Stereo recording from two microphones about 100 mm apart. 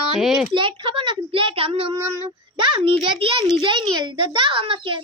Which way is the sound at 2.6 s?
55° right (ahead or behind).